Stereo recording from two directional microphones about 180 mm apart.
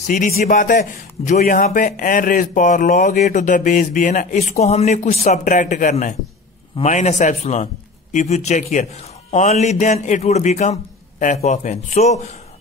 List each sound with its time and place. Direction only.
0.0 s a man's voice: 45° left (ahead or behind)